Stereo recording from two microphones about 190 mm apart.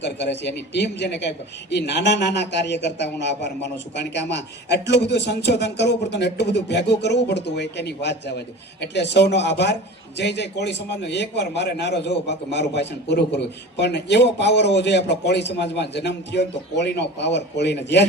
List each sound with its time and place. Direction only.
0.0 s a man's voice: 65° left (ahead or behind)